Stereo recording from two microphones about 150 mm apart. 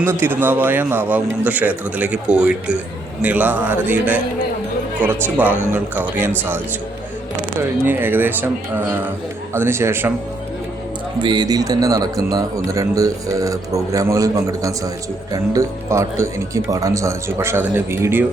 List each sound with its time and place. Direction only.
0.0 s a man's voice: 15° right (ahead or behind)
7.9 s a man's voice: 15° right (ahead or behind)
11.2 s speech: 30° right (ahead or behind)